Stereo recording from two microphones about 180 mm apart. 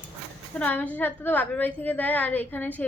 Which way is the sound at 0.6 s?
10° left (ahead or behind).